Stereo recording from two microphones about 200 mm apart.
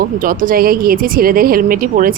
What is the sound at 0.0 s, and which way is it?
A woman's voice, 45° right (ahead or behind).